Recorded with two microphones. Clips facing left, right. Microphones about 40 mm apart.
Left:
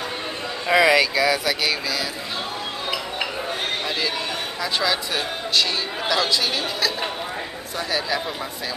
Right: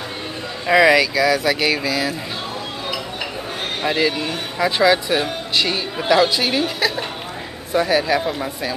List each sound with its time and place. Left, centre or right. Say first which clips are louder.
0.7 s speech: right 3 dB; centre
1.4 s speech: right 5 dB; centre
3.8 s speech: right 6 dB; right
7.7 s speech: right 8 dB; centre